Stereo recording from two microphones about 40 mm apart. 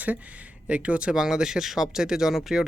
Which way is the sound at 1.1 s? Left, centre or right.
Centre.